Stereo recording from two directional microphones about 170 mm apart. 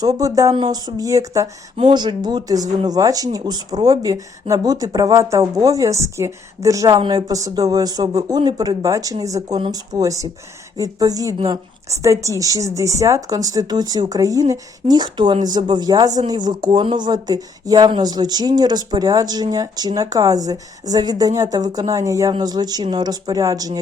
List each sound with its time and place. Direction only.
0.0 s speech: 20° right (ahead or behind)